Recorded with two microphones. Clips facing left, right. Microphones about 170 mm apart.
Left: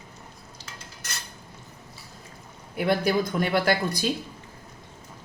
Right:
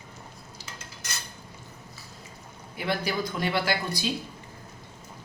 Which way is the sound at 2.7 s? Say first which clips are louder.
Left 6 dB; 50° left (ahead or behind).